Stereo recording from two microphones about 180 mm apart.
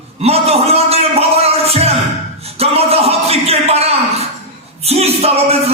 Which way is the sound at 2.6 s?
35° right (ahead or behind).